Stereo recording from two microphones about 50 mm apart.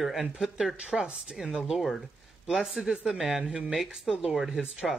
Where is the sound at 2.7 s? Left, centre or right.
Right.